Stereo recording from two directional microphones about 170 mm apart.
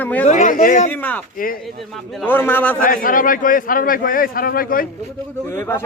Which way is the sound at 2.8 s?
50° left (ahead or behind).